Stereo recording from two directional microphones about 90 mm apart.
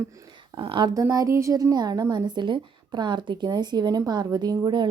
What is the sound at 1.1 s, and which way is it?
A woman's voice, 35° right (ahead or behind).